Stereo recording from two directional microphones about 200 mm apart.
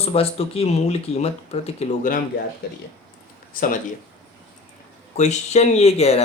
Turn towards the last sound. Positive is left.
turn(degrees=30)  # may be behind; listen again after turning